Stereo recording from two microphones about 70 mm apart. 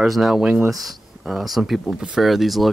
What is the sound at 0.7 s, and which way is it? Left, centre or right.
Speech, centre.